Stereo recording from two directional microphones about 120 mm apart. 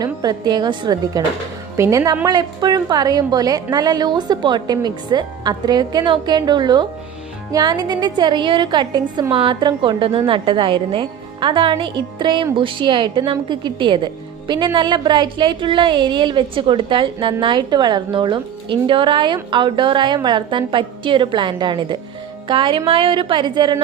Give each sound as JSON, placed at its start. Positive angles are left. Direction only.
{"t": 0.0, "sound": "a woman's voice", "side_deg": -35}
{"t": 1.7, "sound": "a woman's voice", "side_deg": -25}